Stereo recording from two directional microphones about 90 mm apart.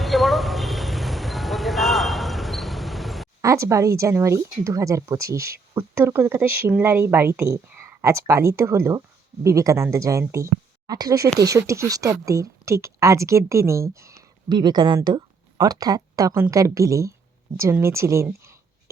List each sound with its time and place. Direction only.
0.0 s a sound: centre (ahead or behind)
3.4 s speech: 35° right (ahead or behind)
14.5 s speech: 55° right (ahead or behind); by 18.5 s 30° right (ahead or behind)